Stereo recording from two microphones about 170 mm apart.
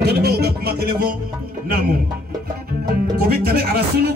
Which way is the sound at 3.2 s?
60° right (ahead or behind).